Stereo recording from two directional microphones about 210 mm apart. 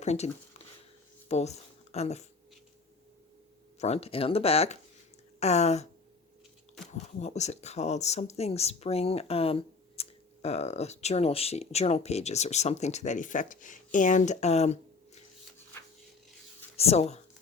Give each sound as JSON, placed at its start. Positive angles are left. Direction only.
{"t": 0.0, "sound": "speech", "side_deg": 30}
{"t": 1.3, "sound": "speech", "side_deg": 30}
{"t": 3.8, "sound": "speech", "side_deg": 30}
{"t": 6.9, "sound": "speech", "side_deg": 35}
{"t": 16.7, "sound": "speech", "side_deg": 30}